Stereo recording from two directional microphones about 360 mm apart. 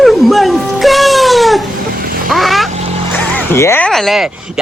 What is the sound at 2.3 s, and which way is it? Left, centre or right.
Vehicle, centre.